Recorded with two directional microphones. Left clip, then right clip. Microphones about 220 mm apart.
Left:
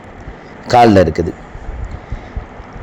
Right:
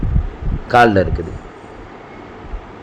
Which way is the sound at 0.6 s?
15° left (ahead or behind).